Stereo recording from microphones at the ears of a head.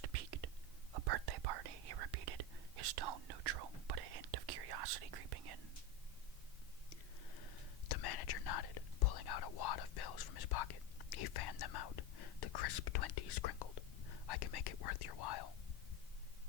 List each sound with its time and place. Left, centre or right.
0.0 s whispering: right
6.9 s whispering: left